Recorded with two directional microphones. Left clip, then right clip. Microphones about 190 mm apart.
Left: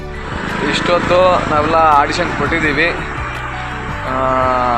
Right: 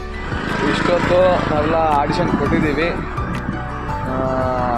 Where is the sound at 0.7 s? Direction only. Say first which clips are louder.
Left 3 dB; 5° left (ahead or behind).